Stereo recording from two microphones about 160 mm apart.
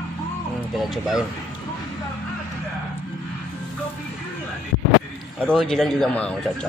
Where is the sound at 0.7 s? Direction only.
Centre (ahead or behind).